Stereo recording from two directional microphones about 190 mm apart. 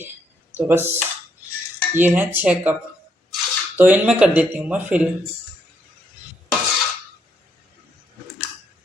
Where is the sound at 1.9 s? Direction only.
10° right (ahead or behind).